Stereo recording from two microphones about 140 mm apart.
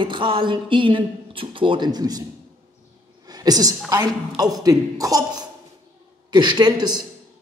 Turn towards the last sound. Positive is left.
turn(degrees=-30)  # may be behind; listen again after turning